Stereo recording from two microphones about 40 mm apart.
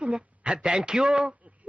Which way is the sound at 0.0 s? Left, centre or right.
Right.